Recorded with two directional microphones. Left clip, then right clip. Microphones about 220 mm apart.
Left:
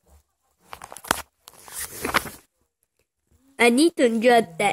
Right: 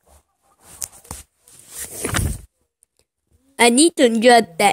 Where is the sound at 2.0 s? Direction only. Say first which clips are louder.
Left 2 dB; 5° right (ahead or behind).